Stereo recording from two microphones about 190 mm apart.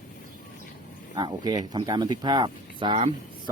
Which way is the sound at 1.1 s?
20° right (ahead or behind).